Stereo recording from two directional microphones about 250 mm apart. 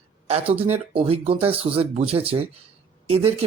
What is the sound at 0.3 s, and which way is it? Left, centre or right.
Speech, right.